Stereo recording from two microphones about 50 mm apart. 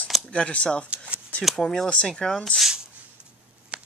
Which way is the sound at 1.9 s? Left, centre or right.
Left.